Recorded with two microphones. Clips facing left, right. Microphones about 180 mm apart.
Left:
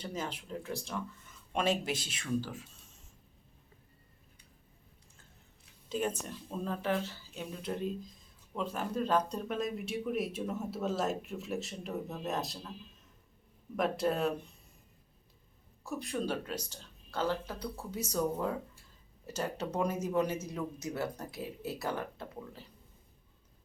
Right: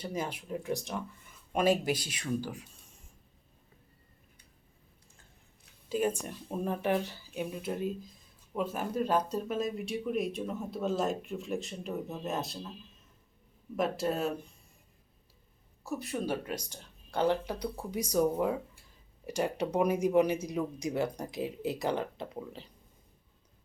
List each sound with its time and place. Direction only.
0.0 s speech: 10° right (ahead or behind)
5.9 s speech: 10° right (ahead or behind)
13.7 s speech: centre (ahead or behind)
16.0 s speech: 5° right (ahead or behind)